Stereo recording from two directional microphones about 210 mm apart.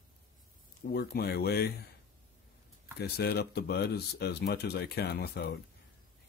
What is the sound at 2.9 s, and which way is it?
Speech, 50° left (ahead or behind).